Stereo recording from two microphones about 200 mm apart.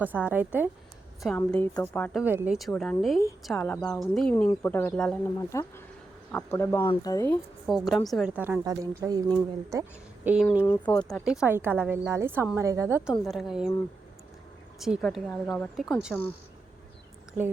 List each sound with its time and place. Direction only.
0.0 s a woman's voice: 10° right (ahead or behind)
1.4 s speech: 10° left (ahead or behind)
2.1 s speech: 10° right (ahead or behind); by 7.3 s 20° left (ahead or behind)
7.7 s a woman's voice: centre (ahead or behind); by 9.9 s 15° right (ahead or behind)
10.2 s speech: 5° right (ahead or behind)
10.7 s speech: 10° left (ahead or behind)
11.3 s a woman's voice: 5° right (ahead or behind)
13.2 s speech: centre (ahead or behind)
14.8 s speech: centre (ahead or behind)